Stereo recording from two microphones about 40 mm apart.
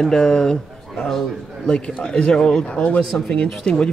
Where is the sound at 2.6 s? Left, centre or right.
Left.